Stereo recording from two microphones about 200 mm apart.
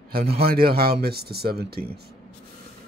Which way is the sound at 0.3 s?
50° right (ahead or behind).